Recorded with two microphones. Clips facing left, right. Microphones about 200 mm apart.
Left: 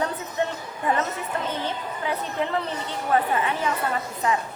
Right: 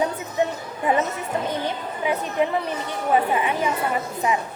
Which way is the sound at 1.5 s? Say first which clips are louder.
Right 3 dB; 15° right (ahead or behind).